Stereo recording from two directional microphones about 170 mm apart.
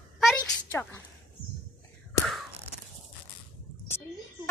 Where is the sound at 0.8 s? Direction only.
10° left (ahead or behind).